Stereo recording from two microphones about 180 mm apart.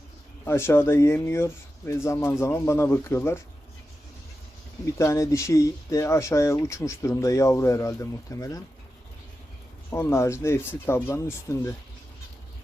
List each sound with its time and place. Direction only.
0.4 s speech: 15° left (ahead or behind)
4.9 s speech: 15° left (ahead or behind)
9.9 s speech: 15° left (ahead or behind)